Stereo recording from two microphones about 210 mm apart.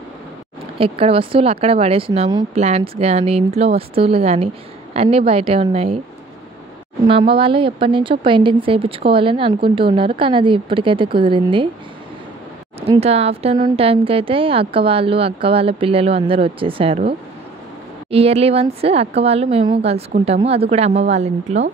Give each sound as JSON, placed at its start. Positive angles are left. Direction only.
{"t": 0.7, "sound": "speech", "side_deg": -25}
{"t": 7.1, "sound": "speech", "side_deg": -25}
{"t": 12.8, "sound": "speech", "side_deg": -30}
{"t": 18.1, "sound": "a woman's voice", "side_deg": -30}